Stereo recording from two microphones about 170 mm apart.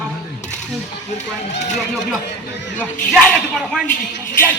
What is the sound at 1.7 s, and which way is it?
Speech, centre (ahead or behind).